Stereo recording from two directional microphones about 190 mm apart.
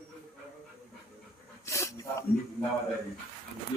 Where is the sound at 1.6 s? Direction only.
15° left (ahead or behind).